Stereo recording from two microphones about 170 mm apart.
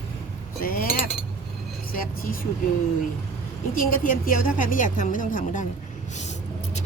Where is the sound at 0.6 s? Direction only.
55° left (ahead or behind).